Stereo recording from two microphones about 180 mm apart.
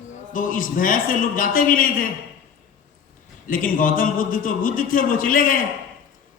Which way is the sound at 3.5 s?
50° left (ahead or behind).